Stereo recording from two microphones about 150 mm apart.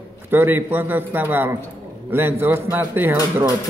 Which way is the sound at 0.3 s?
15° right (ahead or behind).